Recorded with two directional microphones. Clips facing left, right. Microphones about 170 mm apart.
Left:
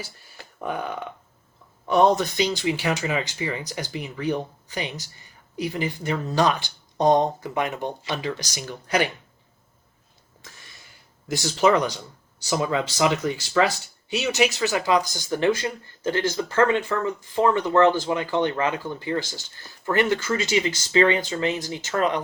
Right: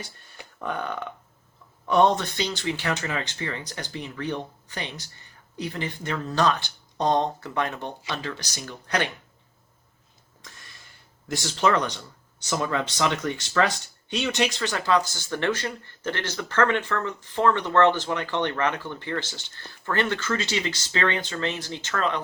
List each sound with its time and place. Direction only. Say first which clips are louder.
0.0 s speech: left 2 dB; 5° left (ahead or behind)
11.3 s speech: left 4 dB; centre (ahead or behind)